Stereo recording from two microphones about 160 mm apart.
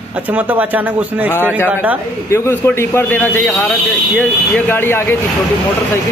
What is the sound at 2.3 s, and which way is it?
Speech, 15° left (ahead or behind).